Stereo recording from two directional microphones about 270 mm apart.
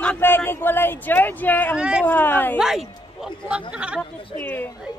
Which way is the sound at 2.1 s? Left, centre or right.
Centre.